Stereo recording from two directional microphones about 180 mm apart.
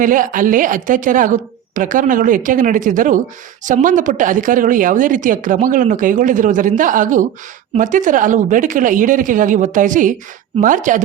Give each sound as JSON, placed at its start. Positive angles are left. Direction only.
{"t": 0.0, "sound": "speech", "side_deg": -50}